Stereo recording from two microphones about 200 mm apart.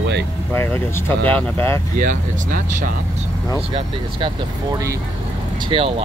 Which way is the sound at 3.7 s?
20° right (ahead or behind).